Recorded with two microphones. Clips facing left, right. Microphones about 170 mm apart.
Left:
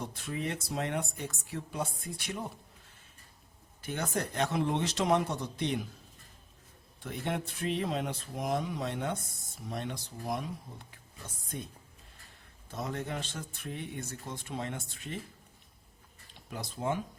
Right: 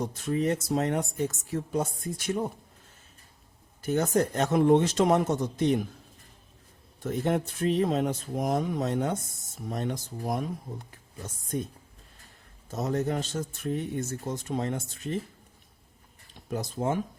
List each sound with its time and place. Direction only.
0.0 s a man's voice: 45° right (ahead or behind)
3.8 s a man's voice: 45° right (ahead or behind)
7.0 s a man's voice: 45° right (ahead or behind)
12.7 s a man's voice: 40° right (ahead or behind)
16.5 s a man's voice: 45° right (ahead or behind)